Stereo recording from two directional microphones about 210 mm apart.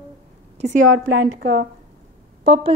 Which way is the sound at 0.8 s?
65° right (ahead or behind).